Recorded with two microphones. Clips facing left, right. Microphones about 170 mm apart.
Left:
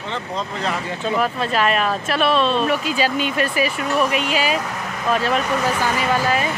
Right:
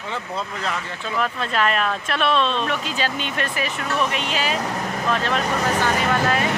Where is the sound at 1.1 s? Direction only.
5° left (ahead or behind).